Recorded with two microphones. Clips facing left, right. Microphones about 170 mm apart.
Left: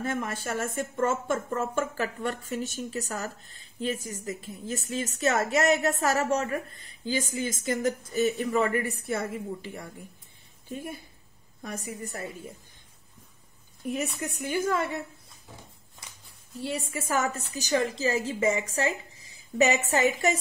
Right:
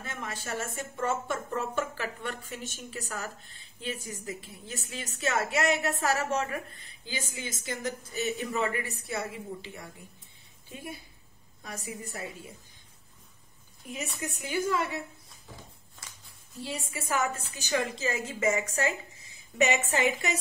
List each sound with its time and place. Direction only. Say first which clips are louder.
0.0 s a woman's voice: left 8 dB; 50° left (ahead or behind)
11.6 s a woman's voice: left 4 dB; 45° left (ahead or behind)
13.8 s a woman's voice: left 6 dB; 55° left (ahead or behind)
16.9 s speech: left 1 dB; 40° left (ahead or behind)